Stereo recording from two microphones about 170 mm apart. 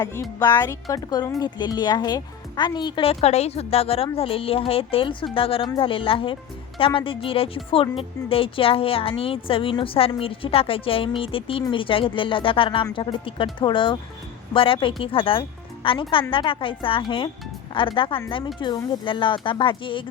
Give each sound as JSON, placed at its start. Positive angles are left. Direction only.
{"t": 0.0, "sound": "speech", "side_deg": 20}